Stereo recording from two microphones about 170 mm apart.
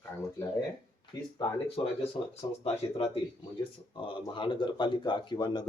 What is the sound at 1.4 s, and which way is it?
Speech, 35° left (ahead or behind).